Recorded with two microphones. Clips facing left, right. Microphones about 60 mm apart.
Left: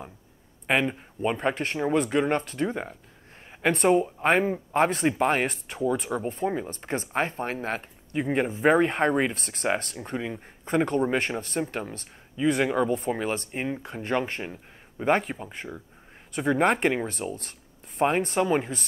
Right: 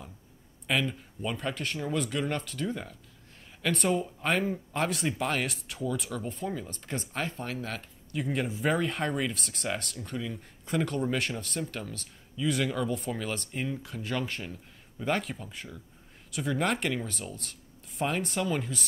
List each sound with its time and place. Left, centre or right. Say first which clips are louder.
0.7 s speech: left 5 dB; left